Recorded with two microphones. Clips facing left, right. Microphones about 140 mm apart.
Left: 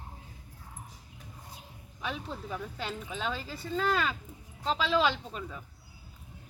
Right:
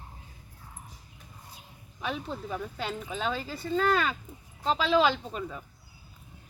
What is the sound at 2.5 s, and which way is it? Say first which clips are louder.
Speech: right 3 dB; centre (ahead or behind).